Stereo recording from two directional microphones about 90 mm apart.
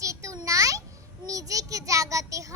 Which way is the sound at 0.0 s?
35° right (ahead or behind).